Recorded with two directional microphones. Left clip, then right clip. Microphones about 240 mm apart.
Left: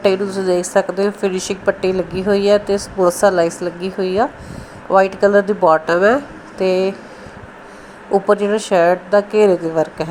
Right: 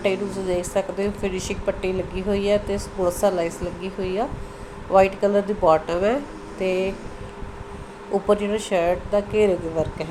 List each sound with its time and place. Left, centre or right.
0.0 s a woman's voice: left
8.1 s a woman's voice: left